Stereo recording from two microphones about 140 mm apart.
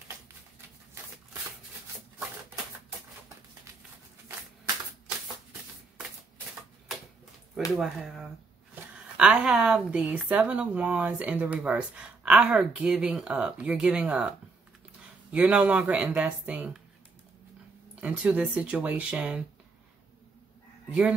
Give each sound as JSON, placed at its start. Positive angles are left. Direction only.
{"t": 7.7, "sound": "a woman's voice", "side_deg": -5}
{"t": 15.3, "sound": "a woman's voice", "side_deg": -10}
{"t": 18.0, "sound": "a woman's voice", "side_deg": -10}